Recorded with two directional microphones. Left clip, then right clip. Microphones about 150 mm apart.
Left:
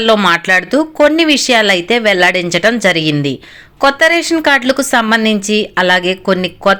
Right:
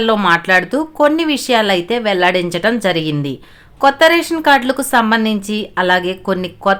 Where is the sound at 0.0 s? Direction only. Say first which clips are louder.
Left 3 dB; 15° left (ahead or behind).